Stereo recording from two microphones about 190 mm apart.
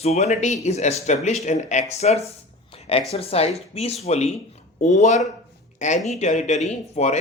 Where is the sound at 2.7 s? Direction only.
30° left (ahead or behind).